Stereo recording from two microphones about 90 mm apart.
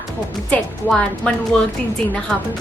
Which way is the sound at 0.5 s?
10° left (ahead or behind).